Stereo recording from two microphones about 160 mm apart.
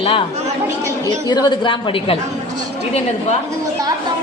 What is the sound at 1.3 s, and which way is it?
Speech, 25° left (ahead or behind).